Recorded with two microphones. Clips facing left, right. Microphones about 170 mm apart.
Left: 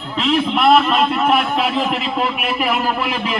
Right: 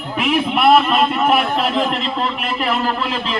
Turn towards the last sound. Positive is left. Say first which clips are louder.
# left 1 dB
turn(degrees=15)  # may be behind; listen again after turning